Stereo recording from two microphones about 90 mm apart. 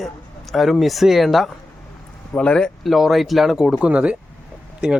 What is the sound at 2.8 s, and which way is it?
Speech, centre (ahead or behind).